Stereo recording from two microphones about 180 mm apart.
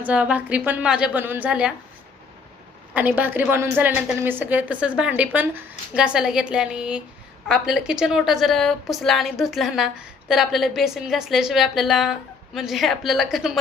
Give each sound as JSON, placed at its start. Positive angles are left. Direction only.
{"t": 0.0, "sound": "a woman's voice", "side_deg": -5}
{"t": 2.9, "sound": "a woman's voice", "side_deg": -10}